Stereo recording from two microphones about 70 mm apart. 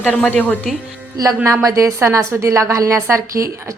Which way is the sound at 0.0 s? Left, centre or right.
Left.